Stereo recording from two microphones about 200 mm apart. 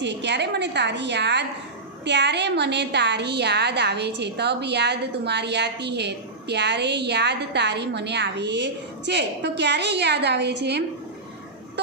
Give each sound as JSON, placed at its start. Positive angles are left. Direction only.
{"t": 0.0, "sound": "a woman's voice", "side_deg": -60}